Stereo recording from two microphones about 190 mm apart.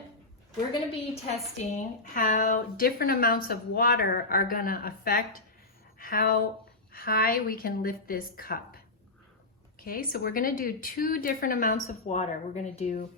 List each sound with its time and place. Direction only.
0.7 s a woman's voice: 35° left (ahead or behind)
2.1 s a woman's voice: 45° left (ahead or behind)